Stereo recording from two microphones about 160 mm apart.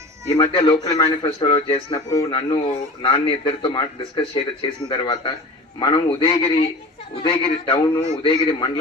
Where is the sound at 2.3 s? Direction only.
30° left (ahead or behind).